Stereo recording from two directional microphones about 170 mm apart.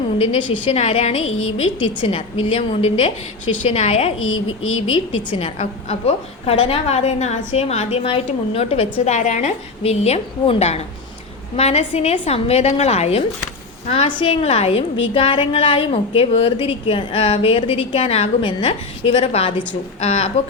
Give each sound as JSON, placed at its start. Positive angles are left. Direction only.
{"t": 0.2, "sound": "a woman's voice", "side_deg": 30}